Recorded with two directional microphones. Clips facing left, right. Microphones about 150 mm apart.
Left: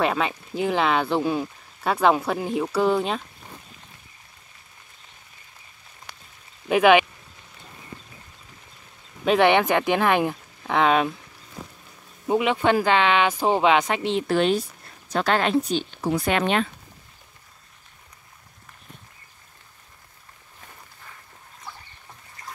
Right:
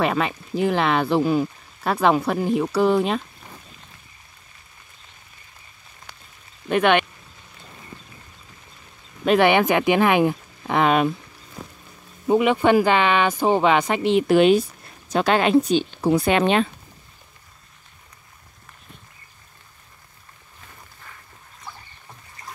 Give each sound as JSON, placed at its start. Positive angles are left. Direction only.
{"t": 0.0, "sound": "speech", "side_deg": 0}
{"t": 6.7, "sound": "speech", "side_deg": 5}
{"t": 9.2, "sound": "speech", "side_deg": 0}
{"t": 12.3, "sound": "a woman's voice", "side_deg": 0}